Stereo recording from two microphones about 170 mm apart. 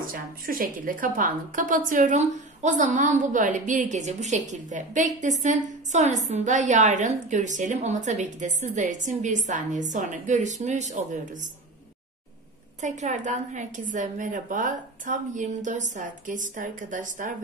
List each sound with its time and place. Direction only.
0.1 s a woman's voice: 55° right (ahead or behind)
12.8 s a woman's voice: 45° right (ahead or behind)